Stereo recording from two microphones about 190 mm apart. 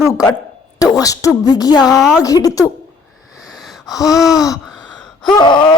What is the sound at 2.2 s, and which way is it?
Speech, 20° left (ahead or behind).